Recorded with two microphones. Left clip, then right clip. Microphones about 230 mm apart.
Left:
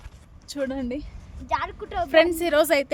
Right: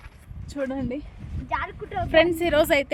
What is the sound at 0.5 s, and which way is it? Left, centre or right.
Speech, centre.